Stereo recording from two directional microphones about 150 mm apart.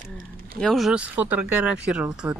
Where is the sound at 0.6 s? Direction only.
Centre (ahead or behind).